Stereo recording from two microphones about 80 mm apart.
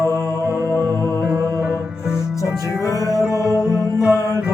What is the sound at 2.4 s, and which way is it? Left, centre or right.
Music, left.